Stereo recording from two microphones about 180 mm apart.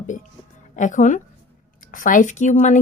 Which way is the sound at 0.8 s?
45° left (ahead or behind).